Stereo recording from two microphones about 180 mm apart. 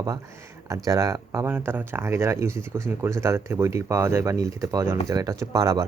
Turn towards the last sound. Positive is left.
turn(degrees=-20)  # may be behind; listen again after turning